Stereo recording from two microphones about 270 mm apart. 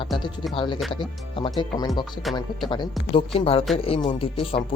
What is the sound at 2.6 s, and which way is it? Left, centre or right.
Speech, centre.